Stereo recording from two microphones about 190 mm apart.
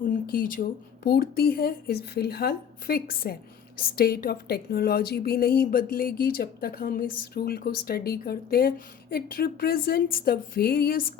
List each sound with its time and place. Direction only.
0.1 s a woman's voice: 45° left (ahead or behind)